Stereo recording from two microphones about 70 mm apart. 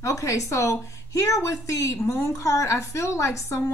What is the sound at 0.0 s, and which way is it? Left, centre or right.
A woman's voice, left.